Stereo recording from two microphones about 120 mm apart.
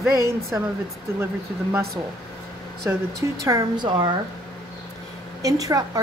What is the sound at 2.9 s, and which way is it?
Speech, 15° right (ahead or behind).